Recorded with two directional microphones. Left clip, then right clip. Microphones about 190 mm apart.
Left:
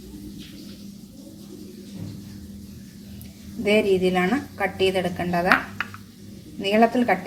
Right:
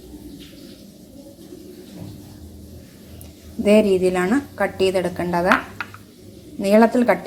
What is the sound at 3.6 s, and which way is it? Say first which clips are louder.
A woman's voice: right 4 dB; 20° right (ahead or behind).